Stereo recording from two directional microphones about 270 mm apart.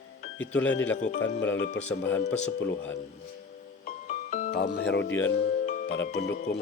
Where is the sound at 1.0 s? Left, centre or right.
Left.